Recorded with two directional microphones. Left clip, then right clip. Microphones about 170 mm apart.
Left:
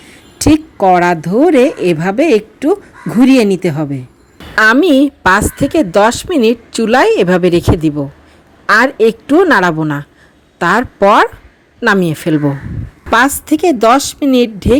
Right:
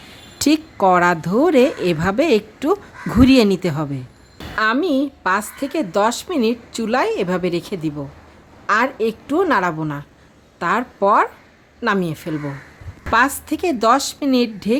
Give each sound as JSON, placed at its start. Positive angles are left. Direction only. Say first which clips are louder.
{"t": 0.3, "sound": "a woman's voice", "louder": "left 7 dB", "side_deg": 15}
{"t": 4.5, "sound": "a woman's voice", "louder": "left 10 dB", "side_deg": 50}